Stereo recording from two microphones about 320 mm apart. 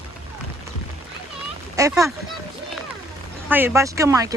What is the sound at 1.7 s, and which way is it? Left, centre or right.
Speech, centre.